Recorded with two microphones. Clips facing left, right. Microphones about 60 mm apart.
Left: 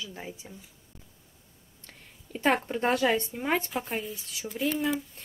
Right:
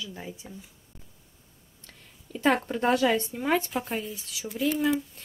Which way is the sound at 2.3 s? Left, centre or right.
Centre.